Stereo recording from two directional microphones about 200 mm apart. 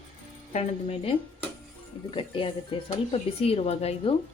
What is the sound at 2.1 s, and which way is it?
Speech, 25° left (ahead or behind).